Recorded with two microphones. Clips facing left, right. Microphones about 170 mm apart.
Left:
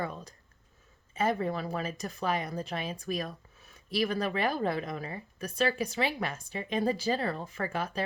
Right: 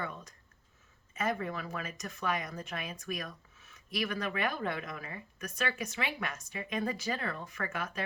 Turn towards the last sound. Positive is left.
turn(degrees=30)  # may be behind; listen again after turning